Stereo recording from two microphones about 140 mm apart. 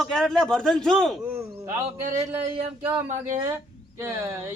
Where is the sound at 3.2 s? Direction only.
20° right (ahead or behind).